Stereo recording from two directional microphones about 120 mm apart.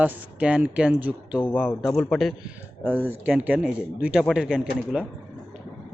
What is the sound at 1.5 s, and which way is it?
Speech, 15° left (ahead or behind).